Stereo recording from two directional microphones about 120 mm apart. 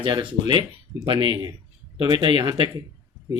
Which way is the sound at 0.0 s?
40° right (ahead or behind).